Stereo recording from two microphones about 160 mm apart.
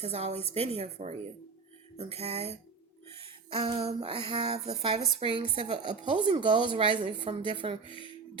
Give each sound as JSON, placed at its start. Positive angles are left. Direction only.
{"t": 0.0, "sound": "a woman's voice", "side_deg": -40}
{"t": 7.9, "sound": "speech", "side_deg": 30}